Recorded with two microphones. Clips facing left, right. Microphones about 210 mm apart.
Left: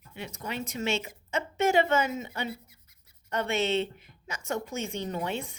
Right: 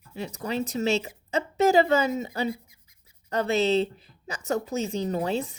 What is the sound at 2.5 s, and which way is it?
Scratch, 10° right (ahead or behind).